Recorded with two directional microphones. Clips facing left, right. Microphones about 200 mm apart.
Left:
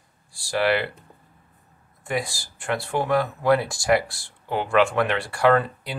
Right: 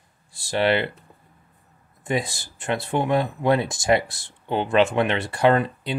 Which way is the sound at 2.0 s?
20° right (ahead or behind).